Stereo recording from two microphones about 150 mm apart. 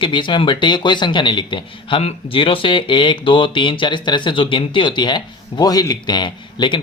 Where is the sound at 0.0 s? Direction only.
35° left (ahead or behind).